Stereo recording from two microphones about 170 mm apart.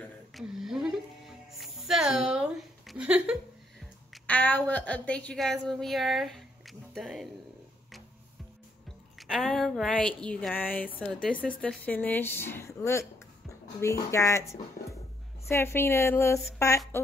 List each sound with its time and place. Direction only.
0.3 s music: centre (ahead or behind)
4.1 s a woman's voice: 10° left (ahead or behind)
9.3 s a woman's voice: centre (ahead or behind)
15.4 s a woman's voice: 15° left (ahead or behind)